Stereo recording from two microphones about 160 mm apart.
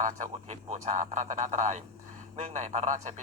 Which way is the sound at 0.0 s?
50° right (ahead or behind).